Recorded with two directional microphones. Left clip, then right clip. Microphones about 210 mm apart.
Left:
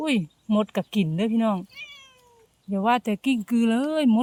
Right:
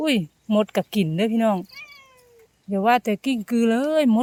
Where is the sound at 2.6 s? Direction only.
15° right (ahead or behind).